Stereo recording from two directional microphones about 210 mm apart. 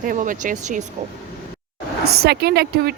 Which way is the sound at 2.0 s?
50° right (ahead or behind).